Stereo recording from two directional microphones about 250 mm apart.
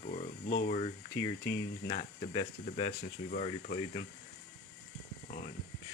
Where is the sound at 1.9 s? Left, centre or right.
Left.